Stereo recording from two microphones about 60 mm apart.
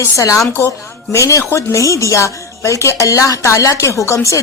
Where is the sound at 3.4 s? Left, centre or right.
Left.